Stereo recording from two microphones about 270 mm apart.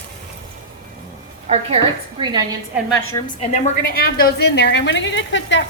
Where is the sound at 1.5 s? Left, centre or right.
Right.